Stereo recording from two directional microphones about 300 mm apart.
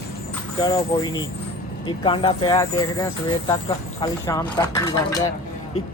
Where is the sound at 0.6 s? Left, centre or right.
Centre.